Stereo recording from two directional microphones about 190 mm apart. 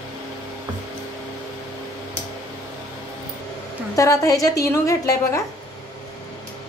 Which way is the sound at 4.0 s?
15° left (ahead or behind).